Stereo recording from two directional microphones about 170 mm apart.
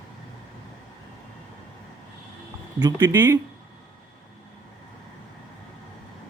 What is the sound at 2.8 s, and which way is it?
Speech, 25° right (ahead or behind).